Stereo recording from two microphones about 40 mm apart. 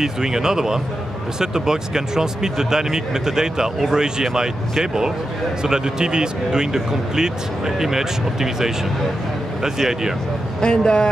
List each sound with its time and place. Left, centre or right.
0.0 s speech: centre
10.6 s speech: centre